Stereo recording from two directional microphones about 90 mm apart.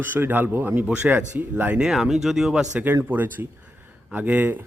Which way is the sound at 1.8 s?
5° right (ahead or behind).